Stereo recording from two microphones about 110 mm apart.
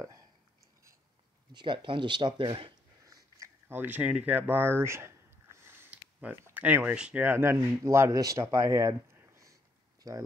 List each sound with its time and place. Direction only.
1.5 s speech: 45° right (ahead or behind)
3.0 s speech: 30° right (ahead or behind)